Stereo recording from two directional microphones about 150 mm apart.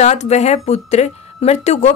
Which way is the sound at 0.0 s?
50° left (ahead or behind).